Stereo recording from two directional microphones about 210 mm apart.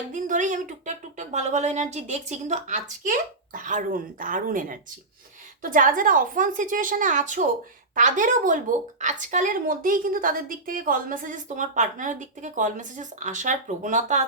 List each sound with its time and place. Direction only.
0.1 s speech: 35° right (ahead or behind)